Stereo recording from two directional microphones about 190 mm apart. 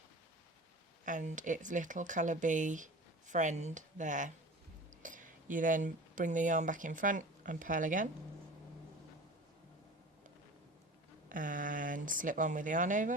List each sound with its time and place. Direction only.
1.0 s speech: 40° right (ahead or behind)
11.3 s speech: 45° right (ahead or behind)